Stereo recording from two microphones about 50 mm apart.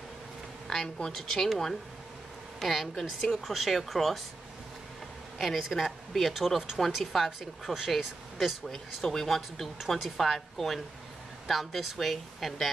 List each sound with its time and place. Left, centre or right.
0.7 s a woman's voice: centre
5.4 s speech: centre